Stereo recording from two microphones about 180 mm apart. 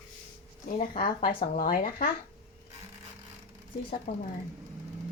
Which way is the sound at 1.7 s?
55° left (ahead or behind).